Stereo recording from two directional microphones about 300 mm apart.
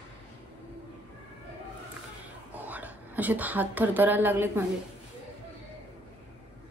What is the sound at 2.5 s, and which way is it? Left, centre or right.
A woman's voice, centre.